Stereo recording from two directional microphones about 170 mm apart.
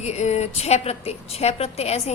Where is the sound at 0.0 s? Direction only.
40° left (ahead or behind).